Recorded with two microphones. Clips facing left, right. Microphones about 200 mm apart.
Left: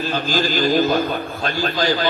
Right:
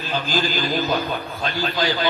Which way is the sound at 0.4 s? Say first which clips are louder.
Left 6 dB; 50° left (ahead or behind).